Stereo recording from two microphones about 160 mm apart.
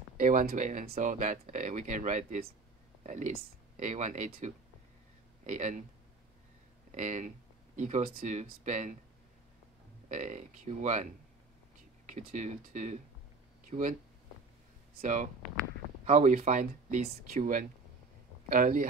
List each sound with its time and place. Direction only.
0.2 s speech: 55° right (ahead or behind)
6.9 s speech: 50° right (ahead or behind)
10.0 s speech: 50° right (ahead or behind)
12.1 s speech: 50° right (ahead or behind)
15.0 s speech: 55° right (ahead or behind)